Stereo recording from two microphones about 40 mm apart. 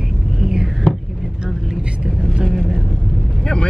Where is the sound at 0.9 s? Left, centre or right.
Left.